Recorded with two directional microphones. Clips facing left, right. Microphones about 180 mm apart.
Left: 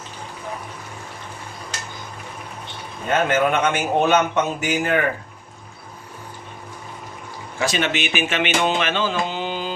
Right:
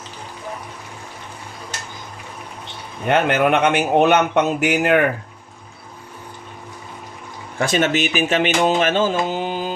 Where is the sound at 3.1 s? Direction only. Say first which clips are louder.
Right 3 dB; 65° right (ahead or behind).